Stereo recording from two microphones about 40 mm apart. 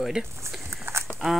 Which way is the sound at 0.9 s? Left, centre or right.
Right.